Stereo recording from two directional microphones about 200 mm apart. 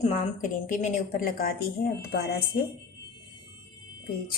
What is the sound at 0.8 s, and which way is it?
A woman's voice, 45° left (ahead or behind).